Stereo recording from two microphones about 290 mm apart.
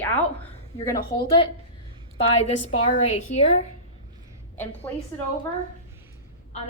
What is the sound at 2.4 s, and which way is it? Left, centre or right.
Speech, left.